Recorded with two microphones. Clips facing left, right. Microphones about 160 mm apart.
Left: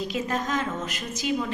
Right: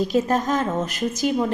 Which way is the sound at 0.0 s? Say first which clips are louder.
Right 8 dB; 40° right (ahead or behind).